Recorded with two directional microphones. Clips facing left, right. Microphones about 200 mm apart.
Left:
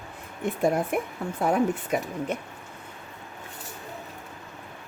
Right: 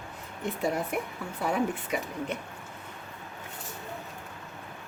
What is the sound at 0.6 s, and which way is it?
Speech, 50° left (ahead or behind).